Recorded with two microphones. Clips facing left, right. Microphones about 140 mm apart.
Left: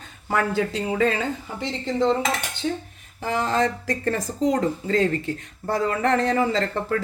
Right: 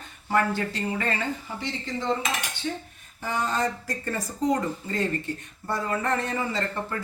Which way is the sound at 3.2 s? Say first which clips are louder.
Left 5 dB; 90° left.